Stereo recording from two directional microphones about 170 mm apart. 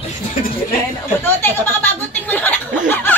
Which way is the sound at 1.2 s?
10° left (ahead or behind).